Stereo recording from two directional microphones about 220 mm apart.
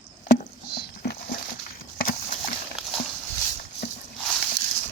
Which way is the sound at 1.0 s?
45° left (ahead or behind).